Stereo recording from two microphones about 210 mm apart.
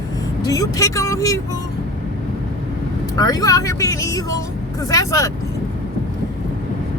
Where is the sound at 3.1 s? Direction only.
15° left (ahead or behind).